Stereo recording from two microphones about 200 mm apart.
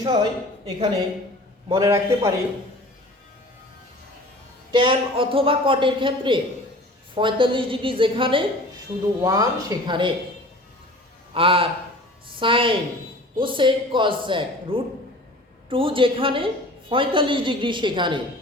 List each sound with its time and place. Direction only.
0.0 s speech: 25° right (ahead or behind)
1.7 s a man's voice: 15° right (ahead or behind)
4.7 s speech: 25° right (ahead or behind)
11.3 s a woman's voice: 25° right (ahead or behind)